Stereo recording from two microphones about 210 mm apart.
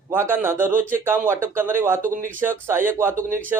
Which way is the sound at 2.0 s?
40° right (ahead or behind).